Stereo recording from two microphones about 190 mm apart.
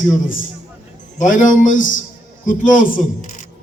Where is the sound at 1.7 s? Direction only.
90° left.